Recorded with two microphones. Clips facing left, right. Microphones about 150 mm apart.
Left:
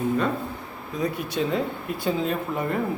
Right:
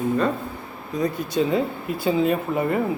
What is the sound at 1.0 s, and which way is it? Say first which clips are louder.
Speech: right 4 dB; centre (ahead or behind).